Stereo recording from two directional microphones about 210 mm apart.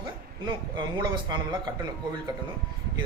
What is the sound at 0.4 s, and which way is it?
Speech, 20° right (ahead or behind).